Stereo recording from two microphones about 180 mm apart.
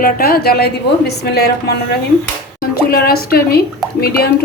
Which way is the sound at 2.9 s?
55° left (ahead or behind).